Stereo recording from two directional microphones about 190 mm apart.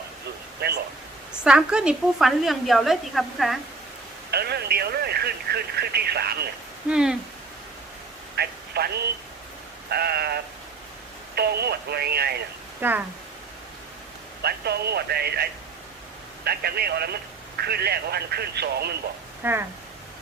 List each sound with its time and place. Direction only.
0.6 s speech: 55° right (ahead or behind)
1.3 s a woman's voice: 5° right (ahead or behind)
4.3 s speech: 55° right (ahead or behind)
6.8 s a woman's voice: 5° right (ahead or behind)
8.4 s telephone: 55° right (ahead or behind)
9.9 s speech: 55° right (ahead or behind)
12.8 s speech: 10° right (ahead or behind)
14.4 s speech: 55° right (ahead or behind)
19.4 s speech: 10° right (ahead or behind)